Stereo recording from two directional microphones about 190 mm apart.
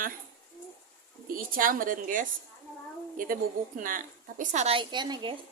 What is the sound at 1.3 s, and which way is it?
A woman's voice, 50° right (ahead or behind).